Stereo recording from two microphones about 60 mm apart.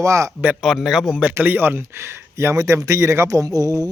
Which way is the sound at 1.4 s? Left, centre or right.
Right.